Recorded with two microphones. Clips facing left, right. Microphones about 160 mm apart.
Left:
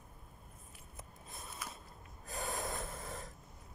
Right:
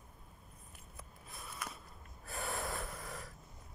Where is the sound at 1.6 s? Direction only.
60° right (ahead or behind).